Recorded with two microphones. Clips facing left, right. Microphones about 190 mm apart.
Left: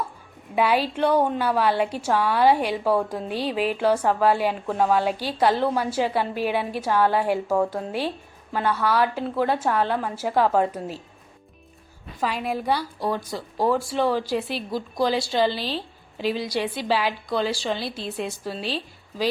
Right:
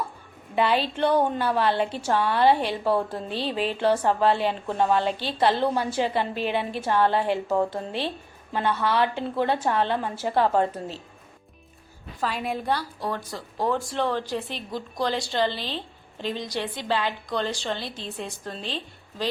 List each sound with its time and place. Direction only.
0.5 s a woman's voice: 10° left (ahead or behind)
12.2 s a woman's voice: 5° left (ahead or behind)